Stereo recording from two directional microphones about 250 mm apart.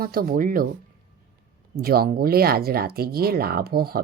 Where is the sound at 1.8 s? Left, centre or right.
Right.